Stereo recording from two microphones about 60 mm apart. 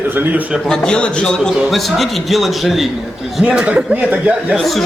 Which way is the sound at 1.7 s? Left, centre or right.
Centre.